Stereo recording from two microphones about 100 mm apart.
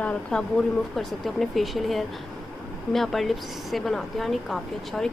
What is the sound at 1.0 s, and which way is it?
A woman's voice, centre (ahead or behind).